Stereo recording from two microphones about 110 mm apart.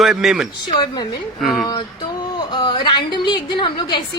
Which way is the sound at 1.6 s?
35° left (ahead or behind).